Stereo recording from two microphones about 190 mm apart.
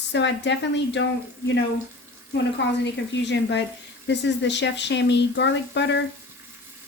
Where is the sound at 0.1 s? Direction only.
70° left (ahead or behind).